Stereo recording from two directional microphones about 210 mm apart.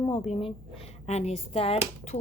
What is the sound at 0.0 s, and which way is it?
Speech, 30° left (ahead or behind).